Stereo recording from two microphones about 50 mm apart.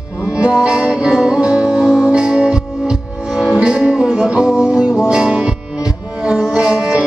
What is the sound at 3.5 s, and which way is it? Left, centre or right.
Music, right.